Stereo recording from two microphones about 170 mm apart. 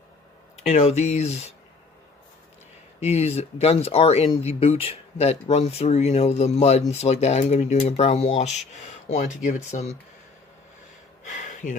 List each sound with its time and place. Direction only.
0.7 s speech: 40° left (ahead or behind)
3.0 s speech: 40° left (ahead or behind)
11.3 s speech: 50° left (ahead or behind)